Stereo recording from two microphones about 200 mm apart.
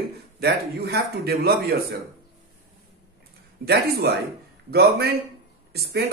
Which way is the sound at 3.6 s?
50° right (ahead or behind).